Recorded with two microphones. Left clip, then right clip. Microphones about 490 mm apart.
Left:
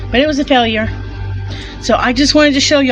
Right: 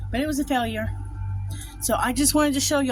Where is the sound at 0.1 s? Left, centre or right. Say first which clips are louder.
Left 13 dB; right.